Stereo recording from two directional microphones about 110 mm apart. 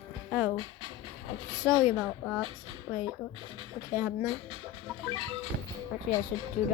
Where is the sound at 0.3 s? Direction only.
10° right (ahead or behind).